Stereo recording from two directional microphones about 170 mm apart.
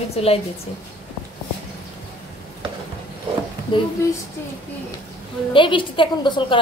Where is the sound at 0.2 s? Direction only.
35° left (ahead or behind).